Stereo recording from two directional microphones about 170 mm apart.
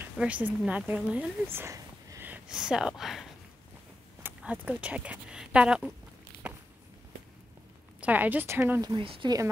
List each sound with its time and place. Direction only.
0.2 s speech: 10° right (ahead or behind)
8.0 s speech: 10° right (ahead or behind)
8.8 s speech: 30° right (ahead or behind)